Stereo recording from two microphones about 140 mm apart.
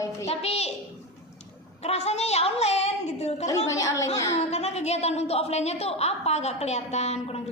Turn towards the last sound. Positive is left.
turn(degrees=50)  # may be behind; listen again after turning